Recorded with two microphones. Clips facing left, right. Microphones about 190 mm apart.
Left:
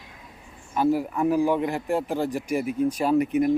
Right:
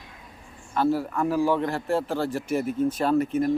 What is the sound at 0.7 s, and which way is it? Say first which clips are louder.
A man's voice: left 1 dB; 15° left (ahead or behind).